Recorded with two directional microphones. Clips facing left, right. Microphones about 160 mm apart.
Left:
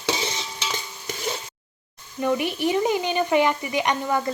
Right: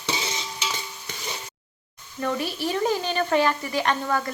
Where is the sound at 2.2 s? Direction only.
15° left (ahead or behind).